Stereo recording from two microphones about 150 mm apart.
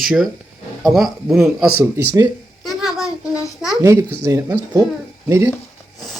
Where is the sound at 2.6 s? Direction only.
Centre (ahead or behind).